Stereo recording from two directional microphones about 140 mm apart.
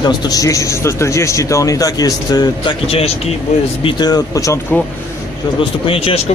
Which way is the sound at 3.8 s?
30° left (ahead or behind).